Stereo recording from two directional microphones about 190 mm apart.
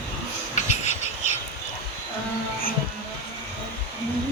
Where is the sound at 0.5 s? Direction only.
40° left (ahead or behind).